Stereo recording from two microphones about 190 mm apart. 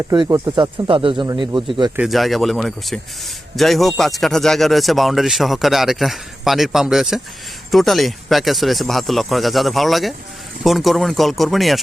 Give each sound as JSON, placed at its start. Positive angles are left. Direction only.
{"t": 0.1, "sound": "speech", "side_deg": -20}
{"t": 2.0, "sound": "speech", "side_deg": 0}